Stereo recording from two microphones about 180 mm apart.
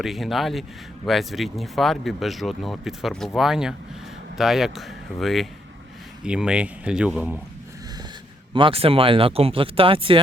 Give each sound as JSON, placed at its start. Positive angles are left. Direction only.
{"t": 0.0, "sound": "speech", "side_deg": 0}
{"t": 8.5, "sound": "speech", "side_deg": -30}